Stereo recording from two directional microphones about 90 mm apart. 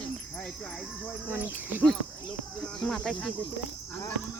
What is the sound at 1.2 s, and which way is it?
Cricket, 20° right (ahead or behind).